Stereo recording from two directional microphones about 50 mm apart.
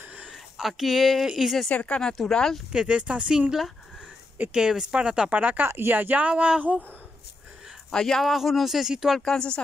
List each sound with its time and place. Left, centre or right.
0.3 s a sound: centre
1.2 s speech: centre
1.7 s speech: left
2.0 s speech: centre
2.7 s speech: right
3.3 s speech: centre
5.3 s speech: right
5.7 s speech: right
5.9 s speech: right
6.2 s speech: right
7.9 s speech: centre
9.2 s speech: centre